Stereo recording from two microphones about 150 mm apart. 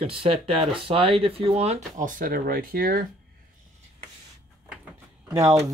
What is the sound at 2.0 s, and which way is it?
Speech, 65° right (ahead or behind).